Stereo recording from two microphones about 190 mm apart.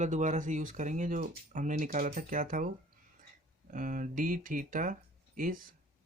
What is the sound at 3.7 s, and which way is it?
Speech, 45° right (ahead or behind).